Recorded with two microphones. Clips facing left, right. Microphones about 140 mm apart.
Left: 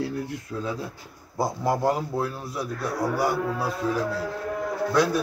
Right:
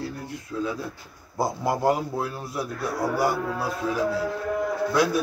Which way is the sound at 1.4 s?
5° right (ahead or behind).